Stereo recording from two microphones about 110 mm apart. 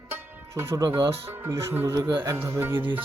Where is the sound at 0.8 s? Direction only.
35° right (ahead or behind).